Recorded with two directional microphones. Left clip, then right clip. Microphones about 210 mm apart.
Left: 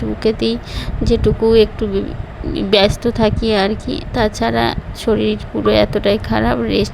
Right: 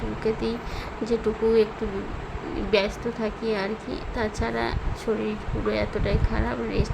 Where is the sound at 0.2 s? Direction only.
30° left (ahead or behind).